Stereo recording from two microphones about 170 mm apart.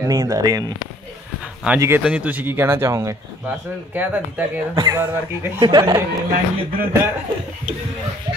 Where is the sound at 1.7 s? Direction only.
15° right (ahead or behind).